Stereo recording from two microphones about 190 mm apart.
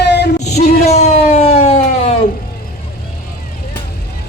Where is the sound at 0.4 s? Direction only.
35° left (ahead or behind).